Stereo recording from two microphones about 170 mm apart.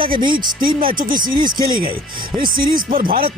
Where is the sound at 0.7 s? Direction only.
55° right (ahead or behind).